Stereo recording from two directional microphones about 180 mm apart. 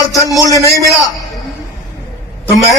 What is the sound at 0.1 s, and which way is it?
Speech, 20° left (ahead or behind).